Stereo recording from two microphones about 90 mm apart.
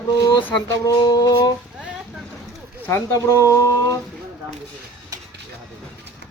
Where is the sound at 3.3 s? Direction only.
35° left (ahead or behind).